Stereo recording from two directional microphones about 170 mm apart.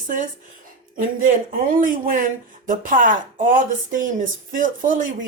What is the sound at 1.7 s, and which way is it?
Speech, 50° right (ahead or behind).